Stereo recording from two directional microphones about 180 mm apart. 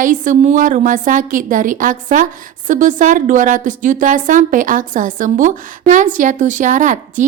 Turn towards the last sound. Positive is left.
turn(degrees=-45)  # may be behind; listen again after turning